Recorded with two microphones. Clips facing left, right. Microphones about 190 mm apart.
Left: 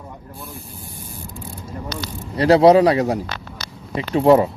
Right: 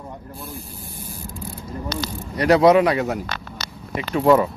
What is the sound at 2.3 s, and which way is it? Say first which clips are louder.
Speech: left 3 dB; 30° left (ahead or behind).